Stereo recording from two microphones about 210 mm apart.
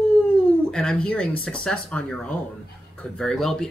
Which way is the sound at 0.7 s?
5° left (ahead or behind).